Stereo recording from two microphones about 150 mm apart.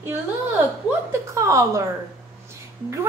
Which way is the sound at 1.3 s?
20° right (ahead or behind).